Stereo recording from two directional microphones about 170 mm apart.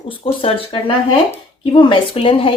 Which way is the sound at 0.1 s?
30° left (ahead or behind).